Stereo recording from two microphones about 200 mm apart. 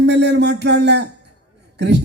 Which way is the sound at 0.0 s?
60° right (ahead or behind).